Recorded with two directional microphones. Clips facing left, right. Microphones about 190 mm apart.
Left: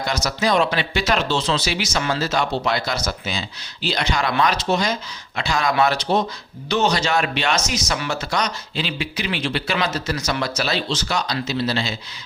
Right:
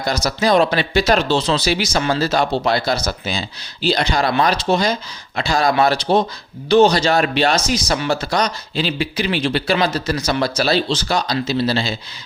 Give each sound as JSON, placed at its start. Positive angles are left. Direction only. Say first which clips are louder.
{"t": 0.0, "sound": "speech", "louder": "right 3 dB", "side_deg": -35}